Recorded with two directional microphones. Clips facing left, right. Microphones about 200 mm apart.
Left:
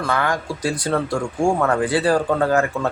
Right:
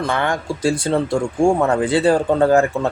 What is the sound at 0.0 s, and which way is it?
Speech, 25° right (ahead or behind).